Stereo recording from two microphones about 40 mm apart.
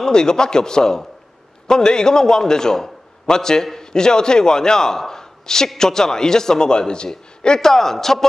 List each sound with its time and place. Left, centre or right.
0.0 s a man's voice: centre